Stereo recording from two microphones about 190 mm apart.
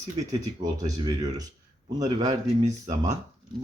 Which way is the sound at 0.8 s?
20° right (ahead or behind).